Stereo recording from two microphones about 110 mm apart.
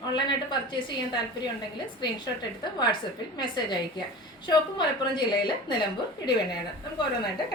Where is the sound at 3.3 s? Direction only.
40° left (ahead or behind).